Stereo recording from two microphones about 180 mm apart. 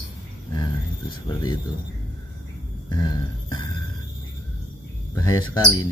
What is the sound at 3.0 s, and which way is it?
Music, 20° left (ahead or behind).